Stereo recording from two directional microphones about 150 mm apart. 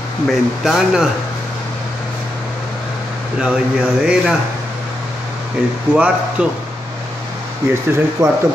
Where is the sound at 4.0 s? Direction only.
5° right (ahead or behind).